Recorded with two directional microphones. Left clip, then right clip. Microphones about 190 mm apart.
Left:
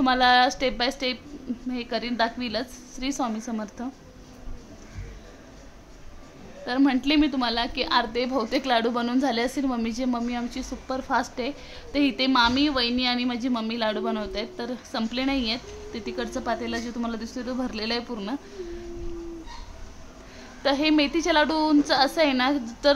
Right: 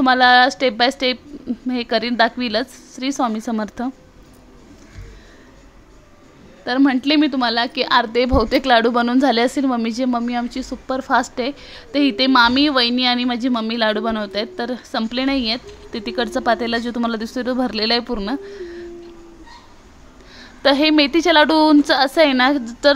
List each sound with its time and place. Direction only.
0.0 s a woman's voice: 35° right (ahead or behind)
6.6 s a woman's voice: 35° right (ahead or behind)
20.3 s a woman's voice: 40° right (ahead or behind)